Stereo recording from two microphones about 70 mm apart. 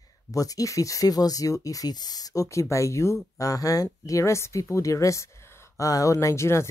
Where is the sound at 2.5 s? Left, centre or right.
Left.